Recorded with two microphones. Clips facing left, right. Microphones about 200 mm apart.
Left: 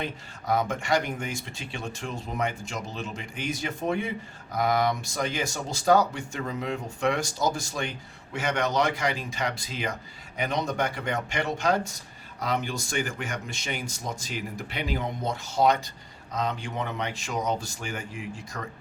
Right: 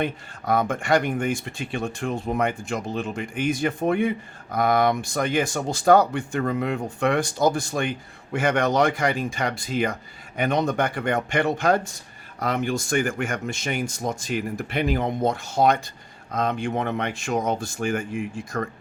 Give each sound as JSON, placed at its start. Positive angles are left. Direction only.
{"t": 0.0, "sound": "speech", "side_deg": -55}